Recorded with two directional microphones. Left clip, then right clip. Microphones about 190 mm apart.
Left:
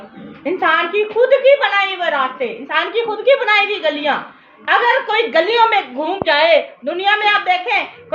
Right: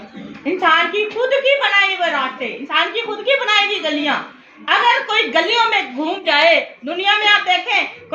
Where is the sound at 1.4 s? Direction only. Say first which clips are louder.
Left 2 dB; 50° left (ahead or behind).